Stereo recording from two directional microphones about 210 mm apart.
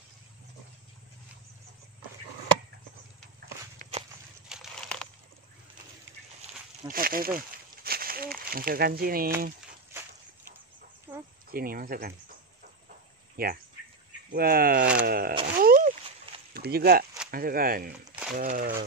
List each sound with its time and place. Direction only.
4.5 s a sound: centre (ahead or behind)
6.9 s speech: 45° right (ahead or behind)
11.1 s cricket: 10° right (ahead or behind)
11.5 s speech: 45° right (ahead or behind)
13.4 s speech: 45° right (ahead or behind)
15.4 s a sound: 45° right (ahead or behind)
16.5 s speech: 45° right (ahead or behind)